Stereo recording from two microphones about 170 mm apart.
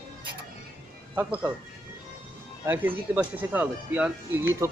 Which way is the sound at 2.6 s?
10° right (ahead or behind).